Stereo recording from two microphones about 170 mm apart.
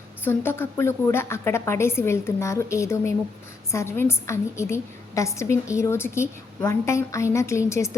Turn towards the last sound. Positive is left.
turn(degrees=15)  # may be behind; listen again after turning